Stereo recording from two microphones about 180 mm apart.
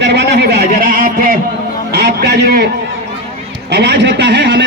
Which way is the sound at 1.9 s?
65° right (ahead or behind).